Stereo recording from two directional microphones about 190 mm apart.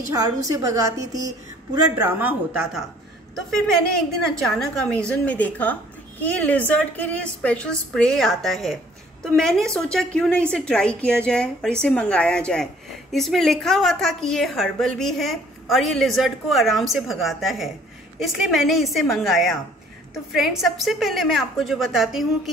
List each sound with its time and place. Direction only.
0.1 s a woman's voice: 20° right (ahead or behind)
4.5 s a woman's voice: 5° left (ahead or behind)